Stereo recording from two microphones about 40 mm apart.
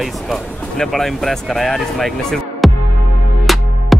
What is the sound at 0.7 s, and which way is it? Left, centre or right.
Speech, centre.